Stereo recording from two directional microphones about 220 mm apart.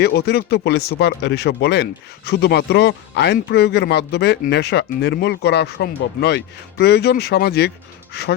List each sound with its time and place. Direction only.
0.0 s speech: 50° left (ahead or behind)